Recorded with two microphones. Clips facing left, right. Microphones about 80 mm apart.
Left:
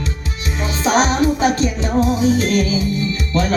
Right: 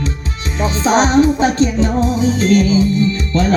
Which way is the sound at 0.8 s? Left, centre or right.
Right.